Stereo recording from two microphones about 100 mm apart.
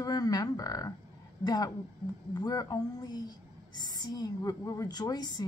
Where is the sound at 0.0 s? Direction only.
40° left (ahead or behind).